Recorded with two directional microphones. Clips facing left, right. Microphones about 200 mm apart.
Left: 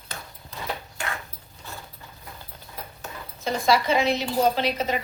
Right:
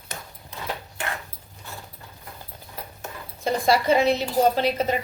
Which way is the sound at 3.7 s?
40° right (ahead or behind).